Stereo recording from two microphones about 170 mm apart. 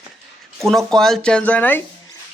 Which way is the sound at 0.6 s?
Centre (ahead or behind).